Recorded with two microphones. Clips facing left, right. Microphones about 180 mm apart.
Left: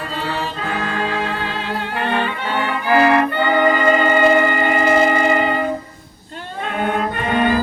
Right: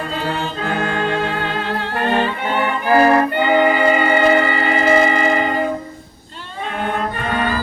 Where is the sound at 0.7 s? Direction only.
55° right (ahead or behind).